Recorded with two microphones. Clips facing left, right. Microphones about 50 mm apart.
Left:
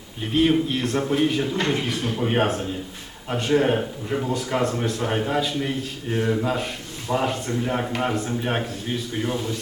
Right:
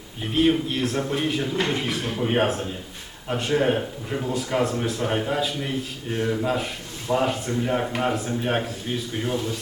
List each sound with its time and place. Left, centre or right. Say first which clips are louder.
0.3 s speech: left 1 dB; centre